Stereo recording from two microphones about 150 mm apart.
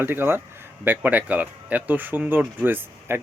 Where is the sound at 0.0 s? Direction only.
15° right (ahead or behind).